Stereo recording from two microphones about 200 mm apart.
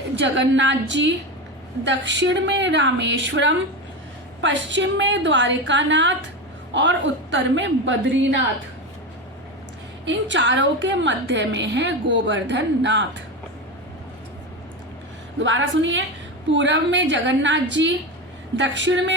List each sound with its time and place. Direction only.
0.2 s a woman's voice: 65° right (ahead or behind)
10.1 s a woman's voice: 65° right (ahead or behind)
15.4 s a woman's voice: 70° right (ahead or behind)